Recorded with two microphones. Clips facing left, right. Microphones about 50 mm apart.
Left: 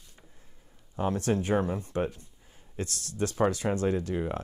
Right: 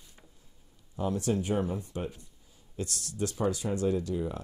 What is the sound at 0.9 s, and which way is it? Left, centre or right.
Speech, left.